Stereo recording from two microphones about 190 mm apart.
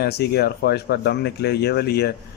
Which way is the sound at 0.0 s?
55° left (ahead or behind).